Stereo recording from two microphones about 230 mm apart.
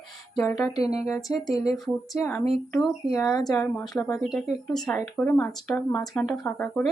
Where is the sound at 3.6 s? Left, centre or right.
Centre.